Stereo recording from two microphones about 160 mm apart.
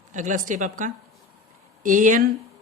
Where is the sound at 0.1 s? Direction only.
50° right (ahead or behind).